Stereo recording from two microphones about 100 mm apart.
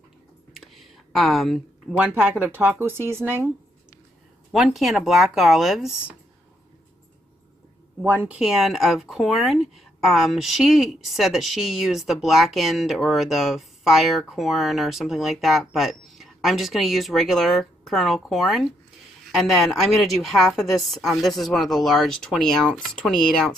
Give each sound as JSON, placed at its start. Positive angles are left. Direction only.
{"t": 0.6, "sound": "a sound", "side_deg": 0}
{"t": 2.0, "sound": "speech", "side_deg": -15}
{"t": 4.5, "sound": "a woman's voice", "side_deg": 0}
{"t": 8.0, "sound": "speech", "side_deg": -15}
{"t": 8.4, "sound": "a woman's voice", "side_deg": 0}